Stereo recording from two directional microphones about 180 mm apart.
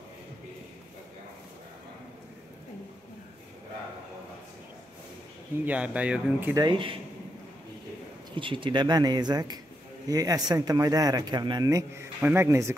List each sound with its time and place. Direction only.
5.7 s speech: 5° right (ahead or behind)
6.5 s speech: 25° right (ahead or behind)
8.4 s speech: 30° right (ahead or behind)